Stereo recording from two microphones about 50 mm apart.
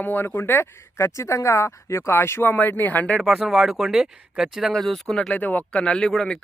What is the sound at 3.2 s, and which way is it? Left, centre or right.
Speech, centre.